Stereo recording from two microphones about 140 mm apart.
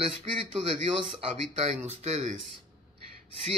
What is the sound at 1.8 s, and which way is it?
Speech, 50° right (ahead or behind).